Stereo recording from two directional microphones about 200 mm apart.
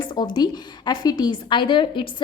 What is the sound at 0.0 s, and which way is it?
A woman's voice, 20° left (ahead or behind).